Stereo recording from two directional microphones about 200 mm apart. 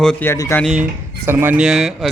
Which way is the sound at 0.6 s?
5° right (ahead or behind).